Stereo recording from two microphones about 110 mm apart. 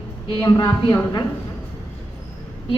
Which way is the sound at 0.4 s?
35° left (ahead or behind).